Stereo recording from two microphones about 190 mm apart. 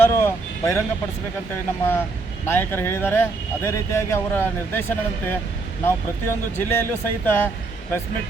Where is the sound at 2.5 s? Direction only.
10° left (ahead or behind).